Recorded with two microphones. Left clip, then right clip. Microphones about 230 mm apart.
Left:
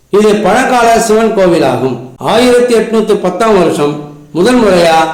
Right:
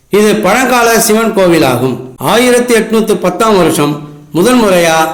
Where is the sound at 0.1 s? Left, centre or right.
Right.